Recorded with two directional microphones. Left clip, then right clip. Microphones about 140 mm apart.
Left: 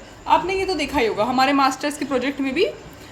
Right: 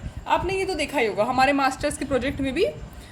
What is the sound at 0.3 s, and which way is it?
A woman's voice, 20° right (ahead or behind).